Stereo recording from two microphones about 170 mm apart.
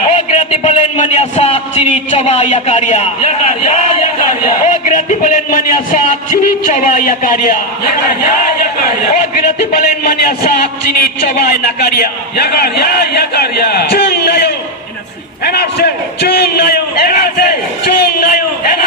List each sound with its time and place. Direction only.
0.1 s a man's voice: 40° left (ahead or behind)
10.0 s a man's voice: 65° left (ahead or behind)
15.4 s a sound: 70° left (ahead or behind)